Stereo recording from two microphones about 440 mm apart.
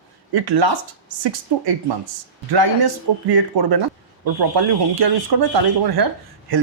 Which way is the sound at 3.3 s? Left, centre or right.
Right.